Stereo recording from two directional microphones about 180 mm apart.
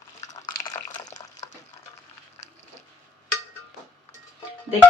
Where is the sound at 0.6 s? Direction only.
20° left (ahead or behind).